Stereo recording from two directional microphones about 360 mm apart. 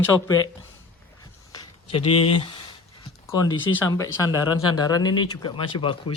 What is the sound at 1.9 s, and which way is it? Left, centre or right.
Speech, centre.